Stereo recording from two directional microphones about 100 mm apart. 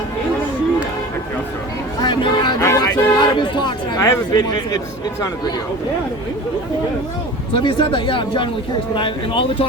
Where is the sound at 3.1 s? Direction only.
50° left (ahead or behind).